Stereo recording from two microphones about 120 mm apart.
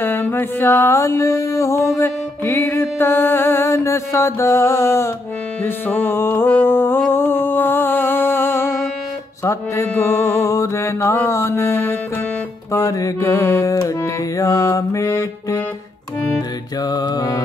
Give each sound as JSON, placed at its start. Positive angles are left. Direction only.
{"t": 0.0, "sound": "music", "side_deg": 15}
{"t": 16.3, "sound": "music", "side_deg": 35}